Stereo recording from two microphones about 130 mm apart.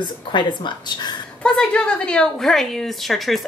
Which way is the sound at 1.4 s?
10° left (ahead or behind).